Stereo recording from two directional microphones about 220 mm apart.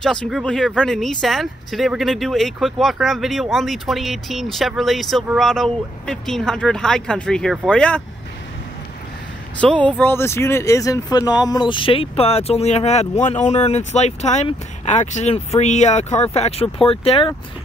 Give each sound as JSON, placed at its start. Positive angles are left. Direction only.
{"t": 0.0, "sound": "speech", "side_deg": 5}
{"t": 9.6, "sound": "speech", "side_deg": 5}